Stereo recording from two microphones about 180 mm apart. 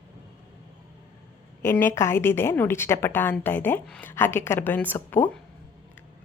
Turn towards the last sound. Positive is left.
turn(degrees=10)  # may be behind; listen again after turning